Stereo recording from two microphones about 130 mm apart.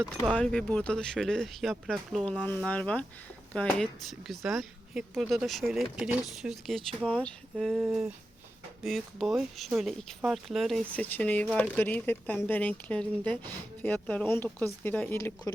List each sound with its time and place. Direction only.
0.3 s a woman's voice: 10° left (ahead or behind)
2.2 s a woman's voice: 10° left (ahead or behind)
7.8 s a sound: 5° right (ahead or behind)
8.8 s a woman's voice: centre (ahead or behind)
11.0 s speech: 15° left (ahead or behind)